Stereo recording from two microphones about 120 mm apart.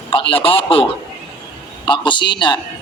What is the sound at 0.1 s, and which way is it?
A man's voice, 50° left (ahead or behind).